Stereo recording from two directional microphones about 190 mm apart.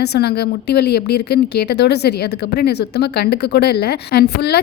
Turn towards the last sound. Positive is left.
turn(degrees=60)  # may be behind; listen again after turning